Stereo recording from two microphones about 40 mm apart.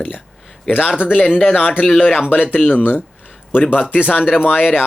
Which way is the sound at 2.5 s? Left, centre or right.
Left.